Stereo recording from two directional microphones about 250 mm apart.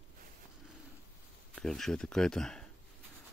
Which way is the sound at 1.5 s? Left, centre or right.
Centre.